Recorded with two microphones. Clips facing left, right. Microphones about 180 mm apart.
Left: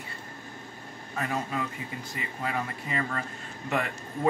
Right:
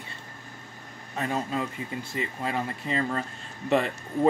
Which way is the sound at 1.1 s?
25° right (ahead or behind).